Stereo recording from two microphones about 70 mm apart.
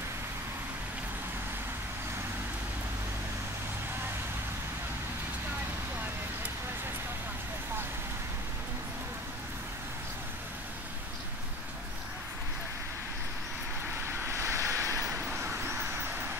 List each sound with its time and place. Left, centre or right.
14.0 s vehicle: right
15.1 s vehicle: right